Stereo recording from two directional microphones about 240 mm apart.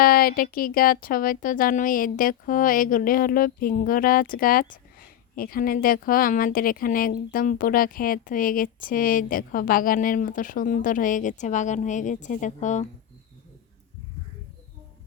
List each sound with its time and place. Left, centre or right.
0.0 s speech: left